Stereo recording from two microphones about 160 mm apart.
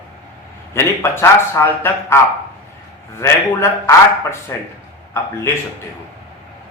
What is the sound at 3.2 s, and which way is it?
A man's voice, 15° left (ahead or behind).